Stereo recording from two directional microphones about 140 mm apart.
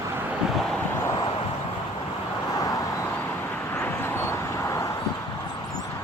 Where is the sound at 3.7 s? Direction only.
15° left (ahead or behind).